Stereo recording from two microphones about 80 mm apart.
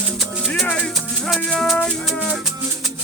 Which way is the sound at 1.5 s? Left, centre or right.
Centre.